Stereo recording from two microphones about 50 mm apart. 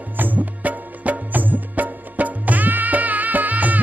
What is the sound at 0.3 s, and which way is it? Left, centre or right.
Music, right.